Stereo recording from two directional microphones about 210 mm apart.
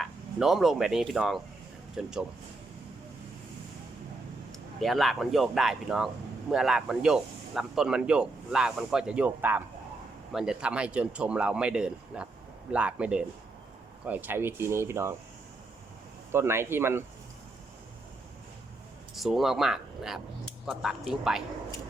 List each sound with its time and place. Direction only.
0.0 s speech: centre (ahead or behind)
4.8 s speech: centre (ahead or behind)
16.3 s speech: 10° right (ahead or behind)
19.1 s speech: centre (ahead or behind)